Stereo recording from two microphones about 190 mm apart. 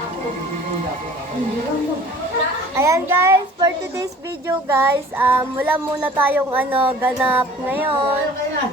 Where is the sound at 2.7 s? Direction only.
15° right (ahead or behind).